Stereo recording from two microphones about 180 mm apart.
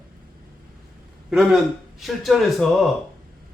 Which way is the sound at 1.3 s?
5° right (ahead or behind).